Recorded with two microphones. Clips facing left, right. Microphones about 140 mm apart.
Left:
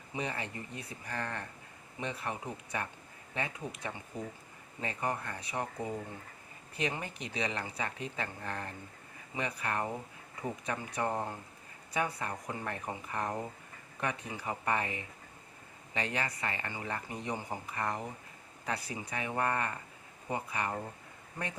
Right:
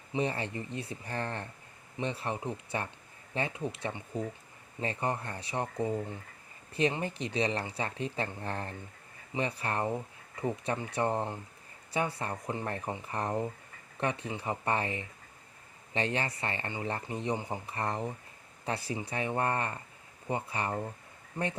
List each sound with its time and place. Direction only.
0.1 s speech: 30° right (ahead or behind)
6.7 s speech: 30° right (ahead or behind)